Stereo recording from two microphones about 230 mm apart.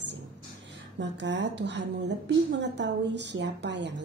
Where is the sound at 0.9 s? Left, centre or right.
Right.